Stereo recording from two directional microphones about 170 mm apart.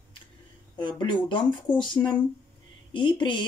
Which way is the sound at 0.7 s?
25° left (ahead or behind).